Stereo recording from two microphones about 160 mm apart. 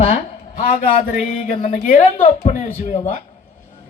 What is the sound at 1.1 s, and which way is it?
A woman's voice, 55° left (ahead or behind).